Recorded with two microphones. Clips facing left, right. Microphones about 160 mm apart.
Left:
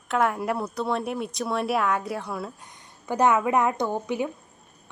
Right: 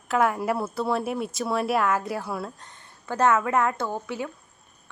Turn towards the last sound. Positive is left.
turn(degrees=15)  # may be behind; listen again after turning